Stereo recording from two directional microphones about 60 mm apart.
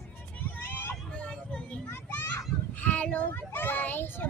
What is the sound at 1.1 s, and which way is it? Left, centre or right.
Vehicle, centre.